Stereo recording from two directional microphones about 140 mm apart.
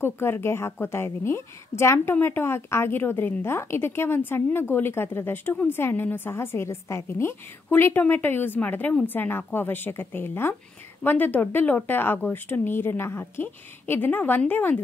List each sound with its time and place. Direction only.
0.0 s a woman's voice: 15° left (ahead or behind)